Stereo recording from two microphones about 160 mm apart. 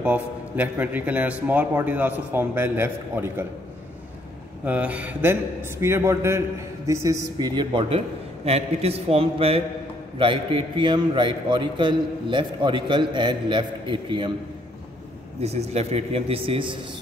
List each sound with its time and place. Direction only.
0.0 s a man's voice: 10° right (ahead or behind)
4.6 s a man's voice: 10° right (ahead or behind); by 8.0 s 30° right (ahead or behind)
8.5 s a man's voice: 40° right (ahead or behind)
15.4 s speech: 40° right (ahead or behind)